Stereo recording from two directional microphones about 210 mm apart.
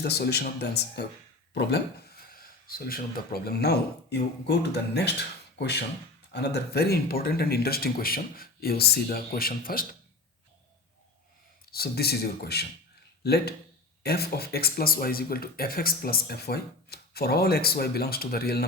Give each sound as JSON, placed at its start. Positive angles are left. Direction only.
{"t": 0.0, "sound": "speech", "side_deg": 50}
{"t": 1.5, "sound": "a sound", "side_deg": 50}
{"t": 3.4, "sound": "speech", "side_deg": 50}
{"t": 11.7, "sound": "speech", "side_deg": 50}